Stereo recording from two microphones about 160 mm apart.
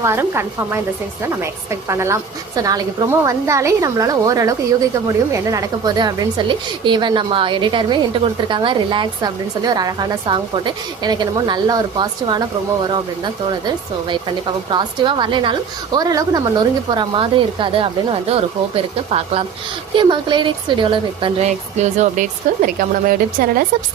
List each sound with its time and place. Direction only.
0.0 s a woman's voice: 15° right (ahead or behind); by 22.2 s 50° right (ahead or behind)
22.6 s a woman's voice: 65° right (ahead or behind)